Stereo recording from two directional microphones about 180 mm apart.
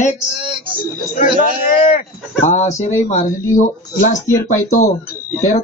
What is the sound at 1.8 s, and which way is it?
Speech, 45° left (ahead or behind).